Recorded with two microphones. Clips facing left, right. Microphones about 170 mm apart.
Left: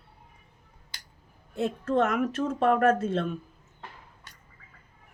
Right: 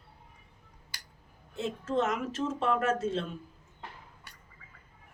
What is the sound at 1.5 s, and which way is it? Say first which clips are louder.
Speech: left 5 dB; 55° left (ahead or behind).